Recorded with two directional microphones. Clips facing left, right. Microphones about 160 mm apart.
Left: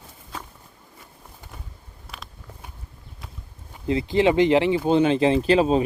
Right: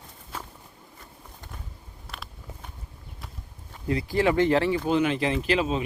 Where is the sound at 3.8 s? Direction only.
25° left (ahead or behind).